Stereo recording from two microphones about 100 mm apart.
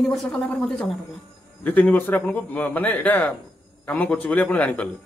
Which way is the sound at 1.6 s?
15° left (ahead or behind).